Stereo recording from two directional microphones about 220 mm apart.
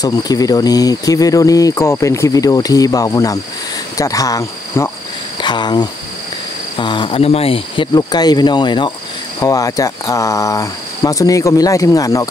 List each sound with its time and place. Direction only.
0.0 s speech: 15° left (ahead or behind)